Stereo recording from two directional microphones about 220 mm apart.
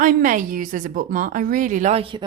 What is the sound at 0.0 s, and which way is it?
A woman's voice, 35° right (ahead or behind).